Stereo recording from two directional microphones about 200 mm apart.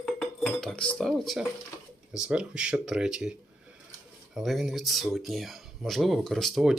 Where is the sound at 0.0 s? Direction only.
5° left (ahead or behind).